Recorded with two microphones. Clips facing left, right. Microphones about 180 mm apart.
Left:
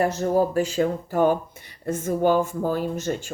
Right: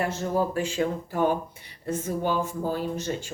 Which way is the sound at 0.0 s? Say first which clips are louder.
Left 5 dB; 40° left (ahead or behind).